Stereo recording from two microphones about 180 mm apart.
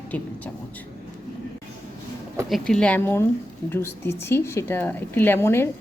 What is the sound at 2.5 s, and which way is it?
A woman's voice, centre (ahead or behind).